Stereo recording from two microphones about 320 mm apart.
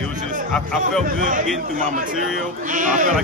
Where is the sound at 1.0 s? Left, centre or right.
Right.